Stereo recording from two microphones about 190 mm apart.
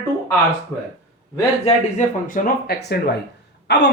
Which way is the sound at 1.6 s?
40° left (ahead or behind).